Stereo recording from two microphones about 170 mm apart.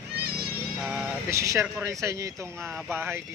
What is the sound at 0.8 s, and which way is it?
Speech, 5° right (ahead or behind).